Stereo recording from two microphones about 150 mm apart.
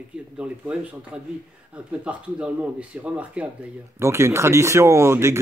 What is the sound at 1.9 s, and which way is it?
Speech, 5° right (ahead or behind).